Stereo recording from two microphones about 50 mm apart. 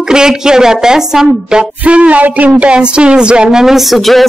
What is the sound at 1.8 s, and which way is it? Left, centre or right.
Speech, right.